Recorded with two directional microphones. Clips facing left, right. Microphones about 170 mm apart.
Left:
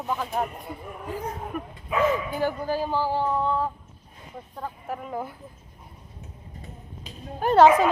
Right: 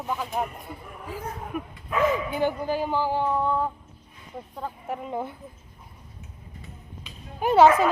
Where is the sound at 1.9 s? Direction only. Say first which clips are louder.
Even; 5° left (ahead or behind).